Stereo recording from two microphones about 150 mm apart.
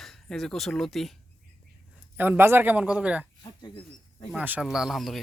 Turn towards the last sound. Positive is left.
turn(degrees=0)  # may be behind; listen again after turning